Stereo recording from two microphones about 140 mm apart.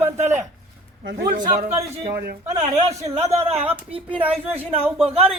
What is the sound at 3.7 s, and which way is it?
Speech, 45° right (ahead or behind).